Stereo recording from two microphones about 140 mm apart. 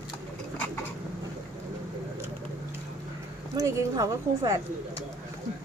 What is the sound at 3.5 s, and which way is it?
A woman's voice, 25° right (ahead or behind).